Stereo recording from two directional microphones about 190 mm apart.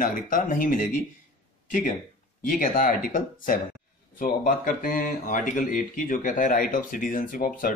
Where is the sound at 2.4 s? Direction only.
45° left (ahead or behind).